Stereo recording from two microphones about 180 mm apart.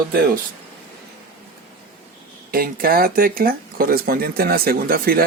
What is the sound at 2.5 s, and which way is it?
Speech, 55° right (ahead or behind).